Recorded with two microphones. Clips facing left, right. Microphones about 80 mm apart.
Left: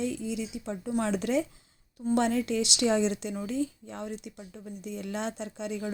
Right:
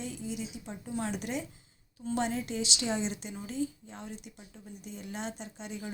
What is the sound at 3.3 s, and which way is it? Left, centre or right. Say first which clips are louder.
Speech: left 4 dB; left.